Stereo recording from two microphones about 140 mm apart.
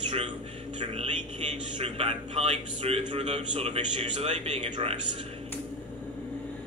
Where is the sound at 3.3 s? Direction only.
50° right (ahead or behind).